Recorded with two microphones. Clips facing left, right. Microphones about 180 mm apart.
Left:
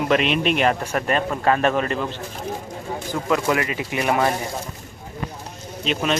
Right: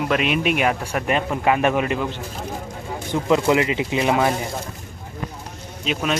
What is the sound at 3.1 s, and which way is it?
Speech, 25° right (ahead or behind).